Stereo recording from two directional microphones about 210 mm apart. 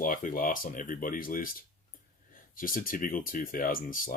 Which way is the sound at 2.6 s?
40° left (ahead or behind).